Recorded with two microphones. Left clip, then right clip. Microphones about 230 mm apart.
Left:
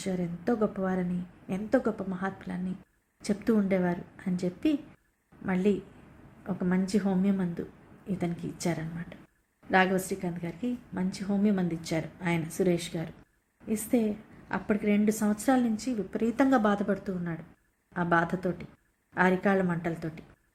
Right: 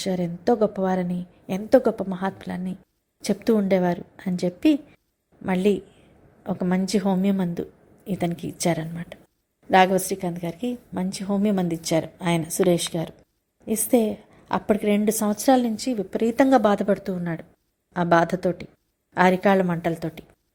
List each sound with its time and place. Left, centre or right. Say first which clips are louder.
0.0 s a woman's voice: right 8 dB; right